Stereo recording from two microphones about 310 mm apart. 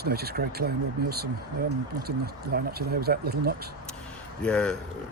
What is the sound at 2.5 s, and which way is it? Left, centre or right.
Speech, right.